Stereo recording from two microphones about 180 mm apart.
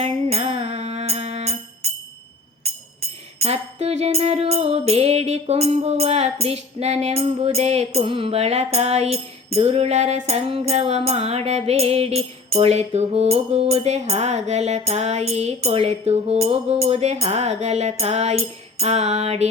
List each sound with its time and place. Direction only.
0.0 s music: 35° right (ahead or behind)
3.4 s music: 35° right (ahead or behind)